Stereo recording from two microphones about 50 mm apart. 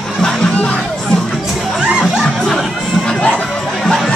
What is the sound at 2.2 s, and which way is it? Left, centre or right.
Music, centre.